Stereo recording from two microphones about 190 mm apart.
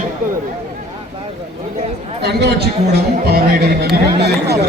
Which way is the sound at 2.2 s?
60° right (ahead or behind).